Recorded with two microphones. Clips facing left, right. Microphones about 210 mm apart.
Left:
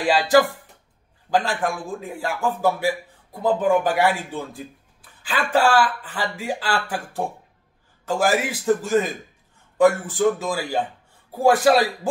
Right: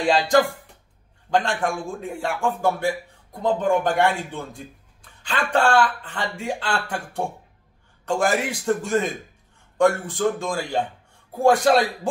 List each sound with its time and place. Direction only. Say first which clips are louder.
1.3 s a man's voice: even; centre (ahead or behind)